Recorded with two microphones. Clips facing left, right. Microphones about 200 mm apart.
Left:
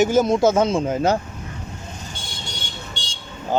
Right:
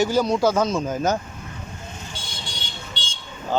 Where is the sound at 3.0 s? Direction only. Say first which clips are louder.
Left 1 dB; 45° left (ahead or behind).